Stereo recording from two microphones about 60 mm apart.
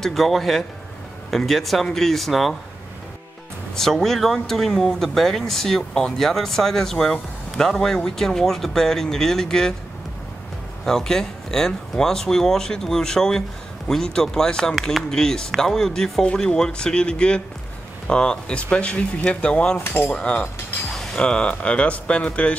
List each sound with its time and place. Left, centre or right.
0.0 s a man's voice: centre
3.7 s speech: centre
10.9 s speech: centre
14.8 s a man's voice: centre
15.0 s speech: centre
19.8 s cutlery: left
20.1 s speech: left